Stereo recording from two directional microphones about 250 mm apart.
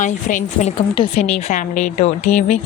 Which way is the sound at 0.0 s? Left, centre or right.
Left.